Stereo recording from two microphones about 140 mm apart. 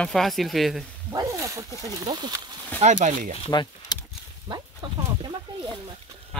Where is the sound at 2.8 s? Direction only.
60° right (ahead or behind).